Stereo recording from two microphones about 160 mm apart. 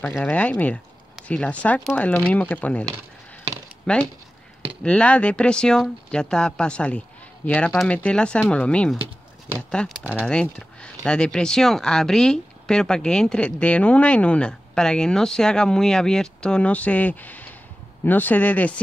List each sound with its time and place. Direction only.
0.2 s speech: 10° left (ahead or behind)
3.9 s speech: 5° left (ahead or behind)